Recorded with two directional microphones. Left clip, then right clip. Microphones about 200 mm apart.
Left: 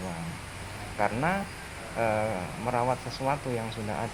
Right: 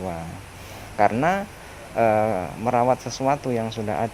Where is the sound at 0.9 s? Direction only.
55° right (ahead or behind).